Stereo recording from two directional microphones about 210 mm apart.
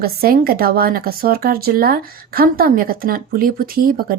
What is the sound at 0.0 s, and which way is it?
Speech, 45° right (ahead or behind).